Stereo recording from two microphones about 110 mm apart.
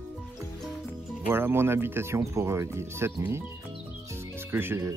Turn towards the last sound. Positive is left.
turn(degrees=-25)  # may be behind; listen again after turning